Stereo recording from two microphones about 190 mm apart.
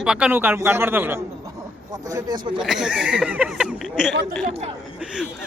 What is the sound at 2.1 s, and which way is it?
Speech, 25° right (ahead or behind).